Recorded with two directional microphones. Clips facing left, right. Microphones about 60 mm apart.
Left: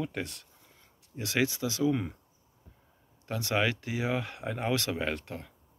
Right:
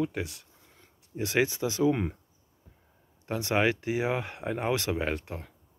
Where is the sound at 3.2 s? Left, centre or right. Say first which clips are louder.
Right 3 dB; right.